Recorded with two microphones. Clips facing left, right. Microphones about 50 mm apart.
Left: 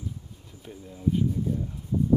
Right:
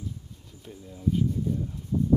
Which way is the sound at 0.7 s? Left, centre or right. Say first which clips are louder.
Left 1 dB; left.